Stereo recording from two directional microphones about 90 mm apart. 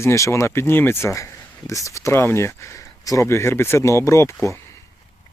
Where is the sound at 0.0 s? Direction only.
30° left (ahead or behind).